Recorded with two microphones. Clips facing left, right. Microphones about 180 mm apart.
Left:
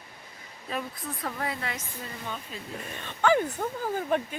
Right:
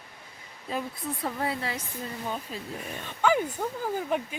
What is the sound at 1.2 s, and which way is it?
Speech, 30° right (ahead or behind).